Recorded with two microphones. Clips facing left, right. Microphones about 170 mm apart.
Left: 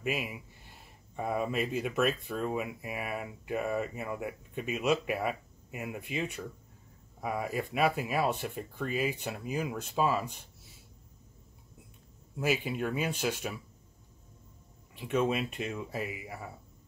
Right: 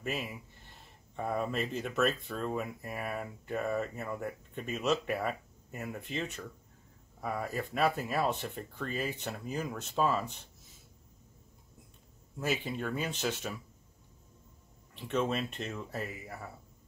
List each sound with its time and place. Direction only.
0.0 s speech: 10° left (ahead or behind)
12.4 s speech: 10° left (ahead or behind)
15.0 s speech: 10° left (ahead or behind)